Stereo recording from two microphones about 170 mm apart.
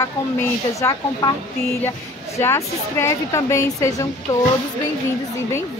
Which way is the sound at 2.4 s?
15° left (ahead or behind).